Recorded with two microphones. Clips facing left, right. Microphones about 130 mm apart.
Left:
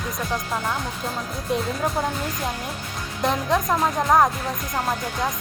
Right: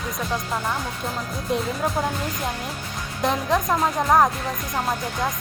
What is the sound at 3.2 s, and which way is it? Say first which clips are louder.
Speech: even; centre (ahead or behind).